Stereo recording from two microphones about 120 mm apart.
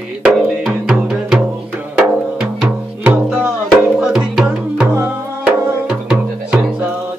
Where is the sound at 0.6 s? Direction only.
Centre (ahead or behind).